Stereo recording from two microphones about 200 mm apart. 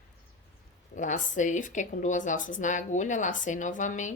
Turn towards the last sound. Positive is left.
turn(degrees=40)  # may be behind; listen again after turning